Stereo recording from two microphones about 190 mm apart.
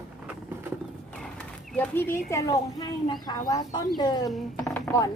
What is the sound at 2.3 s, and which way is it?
A woman's voice, 15° left (ahead or behind).